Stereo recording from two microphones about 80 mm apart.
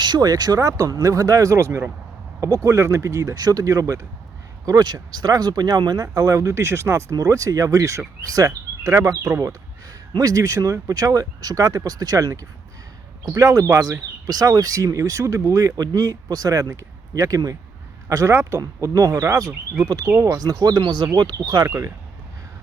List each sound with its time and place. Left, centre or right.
0.0 s speech: right
4.6 s speech: right
19.8 s speech: right
20.1 s speech: right
20.4 s speech: right
21.6 s speech: right